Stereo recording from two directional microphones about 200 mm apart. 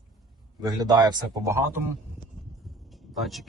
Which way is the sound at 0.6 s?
20° right (ahead or behind).